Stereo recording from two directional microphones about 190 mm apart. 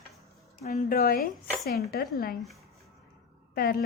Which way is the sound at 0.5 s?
45° left (ahead or behind).